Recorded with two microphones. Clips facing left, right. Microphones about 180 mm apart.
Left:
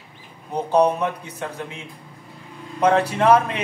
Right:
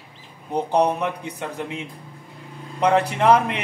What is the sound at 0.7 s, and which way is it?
Speech, 15° right (ahead or behind).